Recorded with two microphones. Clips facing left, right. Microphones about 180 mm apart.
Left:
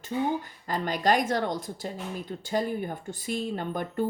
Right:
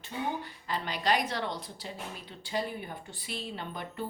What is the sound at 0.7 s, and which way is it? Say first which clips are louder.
A woman's voice: left 5 dB; 45° left (ahead or behind).